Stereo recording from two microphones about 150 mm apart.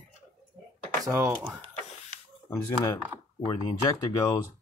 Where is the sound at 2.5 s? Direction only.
20° left (ahead or behind).